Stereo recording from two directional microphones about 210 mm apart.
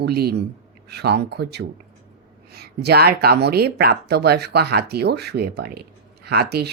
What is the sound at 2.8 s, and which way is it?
A woman's voice, 50° right (ahead or behind).